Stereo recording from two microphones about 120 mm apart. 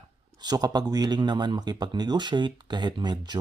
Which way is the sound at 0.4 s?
35° right (ahead or behind).